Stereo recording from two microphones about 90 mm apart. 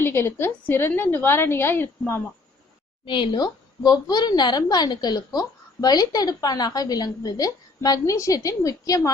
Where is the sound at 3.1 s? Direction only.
70° left (ahead or behind).